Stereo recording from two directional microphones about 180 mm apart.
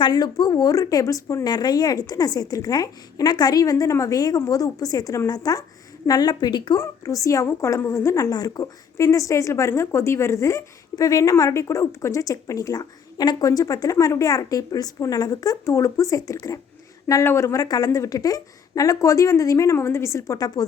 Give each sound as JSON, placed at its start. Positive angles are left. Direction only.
{"t": 0.0, "sound": "a woman's voice", "side_deg": 25}